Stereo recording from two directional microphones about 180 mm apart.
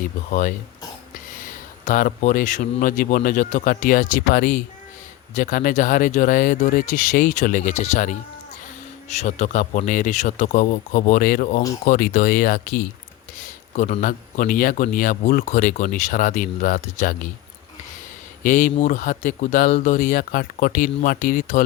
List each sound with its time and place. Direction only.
0.3 s a man's voice: 45° left (ahead or behind)
1.8 s a man's voice: 45° left (ahead or behind)
18.4 s a man's voice: 45° left (ahead or behind)